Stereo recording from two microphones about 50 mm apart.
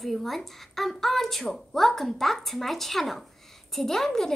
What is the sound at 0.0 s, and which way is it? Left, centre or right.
A woman's voice, centre.